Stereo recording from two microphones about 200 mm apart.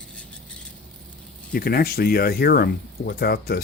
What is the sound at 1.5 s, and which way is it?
Speech, 50° left (ahead or behind).